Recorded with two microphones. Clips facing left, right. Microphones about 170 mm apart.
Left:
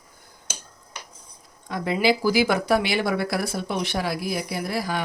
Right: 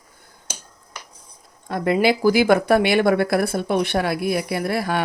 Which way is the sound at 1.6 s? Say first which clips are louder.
Right 4 dB; 55° right (ahead or behind).